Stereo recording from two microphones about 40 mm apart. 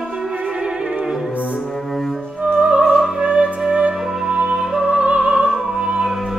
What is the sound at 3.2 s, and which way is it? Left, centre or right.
Music, right.